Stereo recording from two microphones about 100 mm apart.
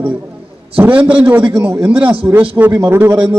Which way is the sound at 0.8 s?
15° right (ahead or behind).